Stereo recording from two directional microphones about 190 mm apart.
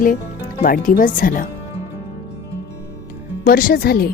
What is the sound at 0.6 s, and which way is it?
Speech, 50° left (ahead or behind).